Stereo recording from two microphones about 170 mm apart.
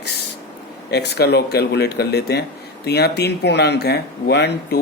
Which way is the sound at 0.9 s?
75° left (ahead or behind).